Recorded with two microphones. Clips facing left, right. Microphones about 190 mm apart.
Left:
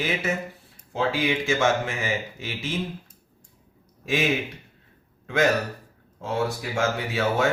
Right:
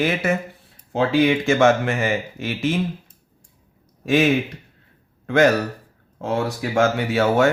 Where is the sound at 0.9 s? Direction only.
60° right (ahead or behind).